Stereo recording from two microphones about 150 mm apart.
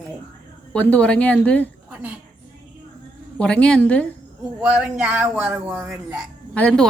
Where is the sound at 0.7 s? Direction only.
10° left (ahead or behind).